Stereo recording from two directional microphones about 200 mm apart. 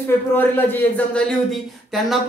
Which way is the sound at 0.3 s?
10° left (ahead or behind).